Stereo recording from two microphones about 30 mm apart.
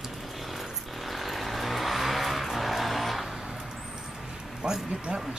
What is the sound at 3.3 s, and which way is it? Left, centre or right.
Vehicle, centre.